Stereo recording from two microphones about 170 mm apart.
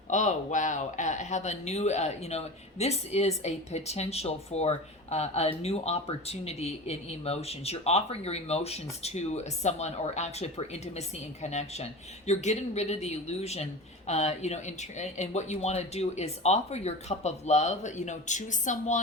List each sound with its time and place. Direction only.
0.1 s speech: 45° left (ahead or behind)